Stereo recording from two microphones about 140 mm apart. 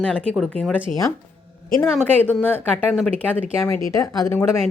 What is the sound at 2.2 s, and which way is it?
Speech, 15° left (ahead or behind).